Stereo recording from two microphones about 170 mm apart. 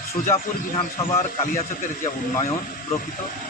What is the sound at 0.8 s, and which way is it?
Speech, 35° left (ahead or behind).